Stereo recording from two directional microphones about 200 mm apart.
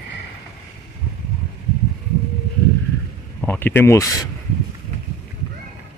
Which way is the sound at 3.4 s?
10° left (ahead or behind).